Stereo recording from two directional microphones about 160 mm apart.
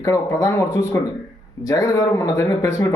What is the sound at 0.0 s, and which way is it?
Speech, 20° left (ahead or behind).